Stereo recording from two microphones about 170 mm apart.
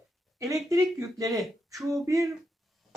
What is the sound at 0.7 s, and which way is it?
A woman's voice, 20° right (ahead or behind).